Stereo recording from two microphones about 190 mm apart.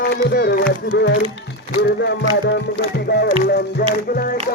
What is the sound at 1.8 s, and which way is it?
Music, 65° left (ahead or behind).